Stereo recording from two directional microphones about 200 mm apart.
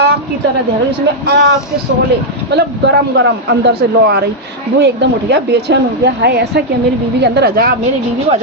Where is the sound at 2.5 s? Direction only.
60° right (ahead or behind).